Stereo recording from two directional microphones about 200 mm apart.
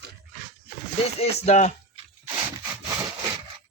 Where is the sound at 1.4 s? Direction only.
35° left (ahead or behind).